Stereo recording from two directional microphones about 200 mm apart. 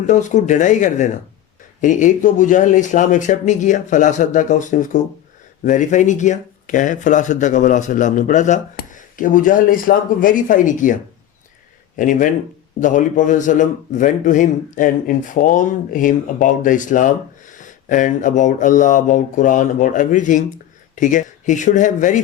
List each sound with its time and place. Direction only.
0.0 s speech: 40° left (ahead or behind)